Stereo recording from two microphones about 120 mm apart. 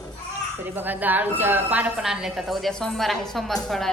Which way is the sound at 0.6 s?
15° right (ahead or behind).